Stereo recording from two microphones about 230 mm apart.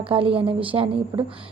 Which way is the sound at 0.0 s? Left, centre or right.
Right.